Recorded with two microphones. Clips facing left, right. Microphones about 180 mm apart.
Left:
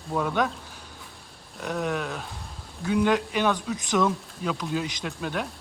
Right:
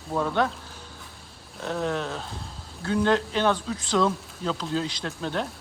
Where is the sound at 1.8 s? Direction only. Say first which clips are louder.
Right 1 dB; 10° left (ahead or behind).